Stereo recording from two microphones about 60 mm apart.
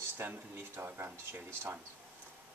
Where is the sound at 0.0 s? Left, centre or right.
Right.